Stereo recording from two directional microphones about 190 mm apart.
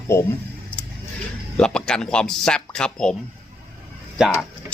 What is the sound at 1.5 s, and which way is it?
Speech, 5° left (ahead or behind).